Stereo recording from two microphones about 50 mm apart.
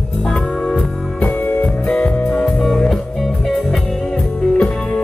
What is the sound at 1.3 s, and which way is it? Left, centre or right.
Music, left.